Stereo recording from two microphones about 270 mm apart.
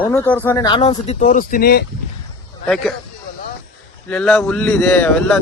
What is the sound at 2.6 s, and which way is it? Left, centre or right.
Speech, centre.